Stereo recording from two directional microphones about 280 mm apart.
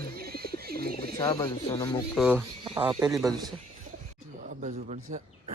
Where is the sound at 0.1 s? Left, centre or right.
Right.